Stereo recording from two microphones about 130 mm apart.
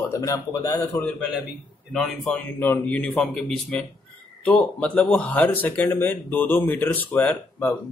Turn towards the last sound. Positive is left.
turn(degrees=15)  # may be behind; listen again after turning